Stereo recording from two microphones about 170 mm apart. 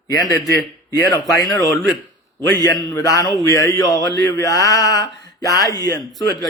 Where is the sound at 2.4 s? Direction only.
20° left (ahead or behind).